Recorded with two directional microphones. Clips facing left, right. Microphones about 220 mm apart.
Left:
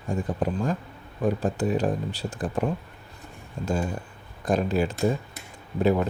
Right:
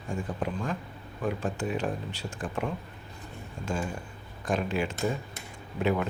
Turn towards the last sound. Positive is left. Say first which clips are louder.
# left 5 dB
turn(degrees=40)  # may be behind; listen again after turning